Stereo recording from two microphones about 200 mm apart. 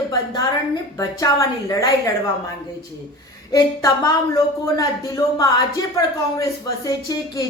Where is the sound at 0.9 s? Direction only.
15° left (ahead or behind).